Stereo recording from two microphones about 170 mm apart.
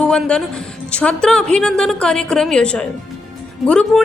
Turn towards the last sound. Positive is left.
turn(degrees=5)  # may be behind; listen again after turning